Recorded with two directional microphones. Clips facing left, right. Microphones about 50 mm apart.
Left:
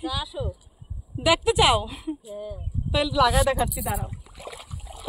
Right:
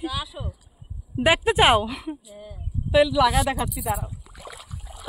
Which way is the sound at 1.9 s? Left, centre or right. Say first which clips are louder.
Right 1 dB; right.